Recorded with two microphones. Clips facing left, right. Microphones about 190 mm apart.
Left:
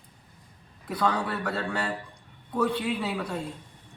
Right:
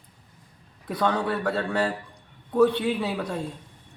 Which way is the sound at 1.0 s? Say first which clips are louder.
Right 3 dB; 25° right (ahead or behind).